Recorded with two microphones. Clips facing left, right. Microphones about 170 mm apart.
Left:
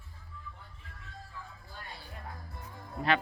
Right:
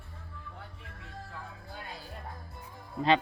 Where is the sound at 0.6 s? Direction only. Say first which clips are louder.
Right 6 dB; 65° right (ahead or behind).